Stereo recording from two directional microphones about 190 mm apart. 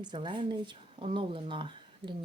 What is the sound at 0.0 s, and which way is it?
Speech, 25° right (ahead or behind).